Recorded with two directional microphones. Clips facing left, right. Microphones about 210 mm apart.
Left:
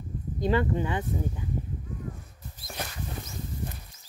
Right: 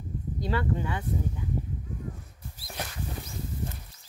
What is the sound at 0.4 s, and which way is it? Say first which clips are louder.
Speech: left 4 dB; 20° left (ahead or behind).